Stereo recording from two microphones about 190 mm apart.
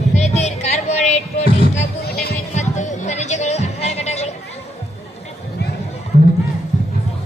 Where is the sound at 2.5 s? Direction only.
40° left (ahead or behind).